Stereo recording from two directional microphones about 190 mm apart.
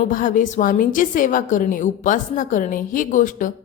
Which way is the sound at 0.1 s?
45° left (ahead or behind).